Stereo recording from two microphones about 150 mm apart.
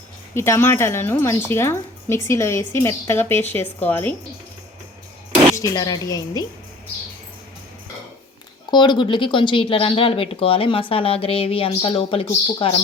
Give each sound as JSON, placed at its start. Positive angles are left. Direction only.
{"t": 0.3, "sound": "a woman's voice", "side_deg": 15}
{"t": 5.5, "sound": "speech", "side_deg": 25}
{"t": 8.7, "sound": "speech", "side_deg": 30}